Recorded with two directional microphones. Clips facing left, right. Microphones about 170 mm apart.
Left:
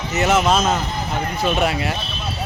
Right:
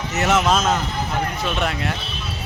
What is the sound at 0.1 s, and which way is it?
A man's voice, centre (ahead or behind).